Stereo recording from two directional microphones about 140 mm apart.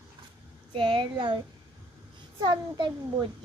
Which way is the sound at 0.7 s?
35° right (ahead or behind).